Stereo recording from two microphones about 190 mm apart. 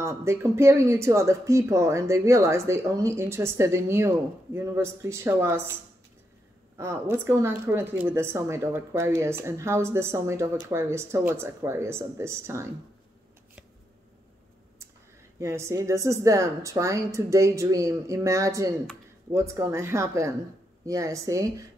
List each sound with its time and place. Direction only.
0.0 s a woman's voice: 15° right (ahead or behind)
6.8 s a woman's voice: 15° right (ahead or behind)
15.3 s a woman's voice: 15° right (ahead or behind)